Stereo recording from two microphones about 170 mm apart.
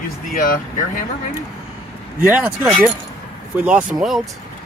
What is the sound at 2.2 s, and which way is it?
Speech, 10° right (ahead or behind).